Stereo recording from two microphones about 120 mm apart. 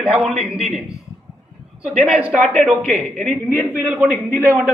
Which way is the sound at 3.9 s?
10° right (ahead or behind).